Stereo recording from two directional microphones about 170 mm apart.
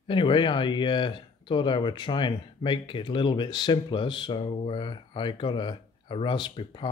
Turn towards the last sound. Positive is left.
turn(degrees=25)  # may be behind; listen again after turning